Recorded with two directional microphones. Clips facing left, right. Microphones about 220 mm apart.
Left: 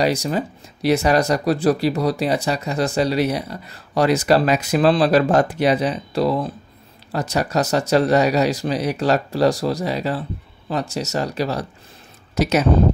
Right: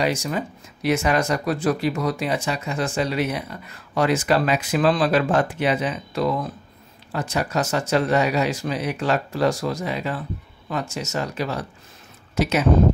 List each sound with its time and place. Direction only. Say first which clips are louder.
0.0 s speech: left 4 dB; 35° left (ahead or behind)